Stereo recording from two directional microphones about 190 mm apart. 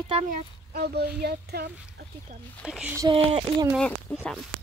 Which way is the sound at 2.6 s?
5° right (ahead or behind).